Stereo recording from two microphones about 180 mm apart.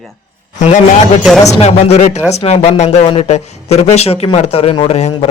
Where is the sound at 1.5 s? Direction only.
35° left (ahead or behind).